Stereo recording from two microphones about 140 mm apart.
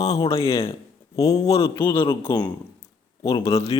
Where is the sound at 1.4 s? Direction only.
45° left (ahead or behind).